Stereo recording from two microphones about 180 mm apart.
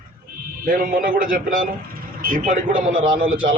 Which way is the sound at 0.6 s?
50° right (ahead or behind).